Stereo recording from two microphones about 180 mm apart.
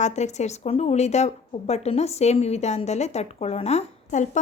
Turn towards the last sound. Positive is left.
turn(degrees=40)  # may be behind; listen again after turning